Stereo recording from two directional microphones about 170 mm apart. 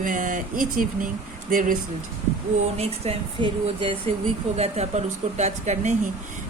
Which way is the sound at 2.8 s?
35° right (ahead or behind).